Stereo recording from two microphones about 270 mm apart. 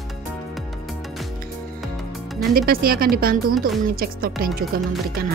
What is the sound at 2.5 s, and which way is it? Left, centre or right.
Speech, right.